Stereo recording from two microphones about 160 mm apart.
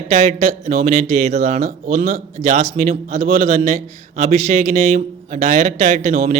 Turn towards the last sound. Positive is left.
turn(degrees=-55)  # may be behind; listen again after turning